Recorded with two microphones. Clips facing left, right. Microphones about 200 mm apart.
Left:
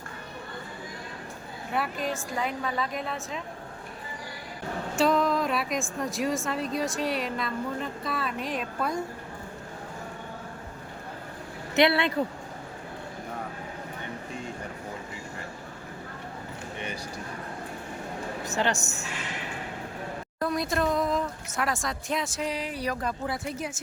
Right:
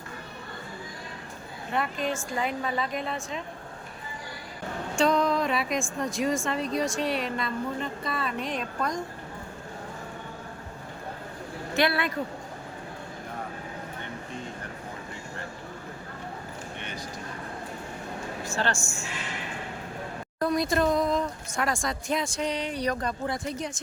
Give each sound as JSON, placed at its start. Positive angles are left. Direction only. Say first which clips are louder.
{"t": 1.7, "sound": "a woman's voice", "louder": "right 1 dB", "side_deg": 5}
{"t": 4.9, "sound": "a woman's voice", "louder": "even", "side_deg": 5}
{"t": 11.7, "sound": "speech", "louder": "left 3 dB", "side_deg": 25}
{"t": 18.4, "sound": "a man's voice", "louder": "left 2 dB", "side_deg": 20}
{"t": 20.4, "sound": "a woman's voice", "louder": "right 3 dB", "side_deg": 0}